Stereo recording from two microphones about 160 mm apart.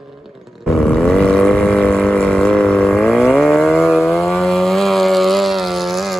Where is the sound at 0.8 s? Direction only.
5° left (ahead or behind).